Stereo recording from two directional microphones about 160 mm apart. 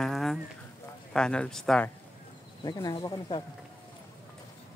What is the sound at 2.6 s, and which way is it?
Speech, 25° left (ahead or behind).